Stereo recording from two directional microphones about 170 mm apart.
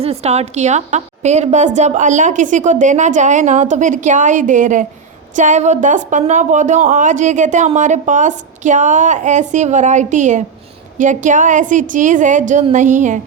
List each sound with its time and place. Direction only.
0.0 s speech: 35° right (ahead or behind)